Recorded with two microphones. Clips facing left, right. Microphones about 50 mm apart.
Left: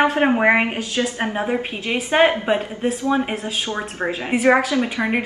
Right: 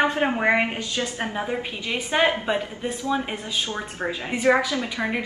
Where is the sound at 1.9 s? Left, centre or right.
Left.